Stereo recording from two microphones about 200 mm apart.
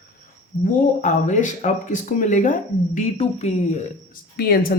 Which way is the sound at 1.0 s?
35° left (ahead or behind).